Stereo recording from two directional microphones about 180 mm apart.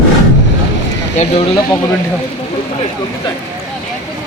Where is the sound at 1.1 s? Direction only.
40° left (ahead or behind).